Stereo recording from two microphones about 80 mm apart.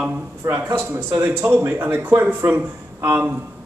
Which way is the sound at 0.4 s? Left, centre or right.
Right.